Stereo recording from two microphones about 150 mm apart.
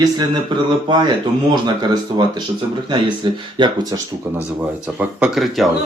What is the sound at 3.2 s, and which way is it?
Speech, 30° right (ahead or behind).